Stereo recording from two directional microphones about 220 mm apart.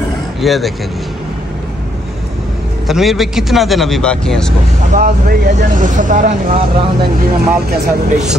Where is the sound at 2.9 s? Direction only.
Centre (ahead or behind).